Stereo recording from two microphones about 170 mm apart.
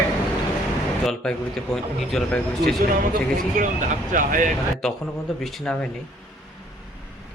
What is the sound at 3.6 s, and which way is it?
Speech, 50° right (ahead or behind).